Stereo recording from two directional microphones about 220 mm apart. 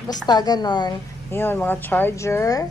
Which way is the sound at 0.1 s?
20° left (ahead or behind).